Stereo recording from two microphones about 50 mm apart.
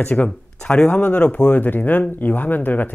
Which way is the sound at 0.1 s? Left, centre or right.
Left.